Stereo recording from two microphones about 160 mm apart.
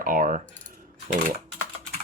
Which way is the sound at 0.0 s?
60° right (ahead or behind).